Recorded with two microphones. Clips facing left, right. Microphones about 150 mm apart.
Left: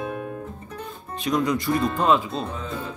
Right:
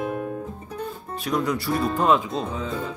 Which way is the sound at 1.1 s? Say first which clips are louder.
Left 2 dB; 10° right (ahead or behind).